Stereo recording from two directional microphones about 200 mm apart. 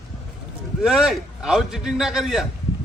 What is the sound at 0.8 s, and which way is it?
A man's voice, 5° right (ahead or behind).